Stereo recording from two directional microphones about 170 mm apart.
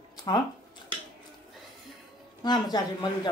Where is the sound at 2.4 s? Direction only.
25° left (ahead or behind).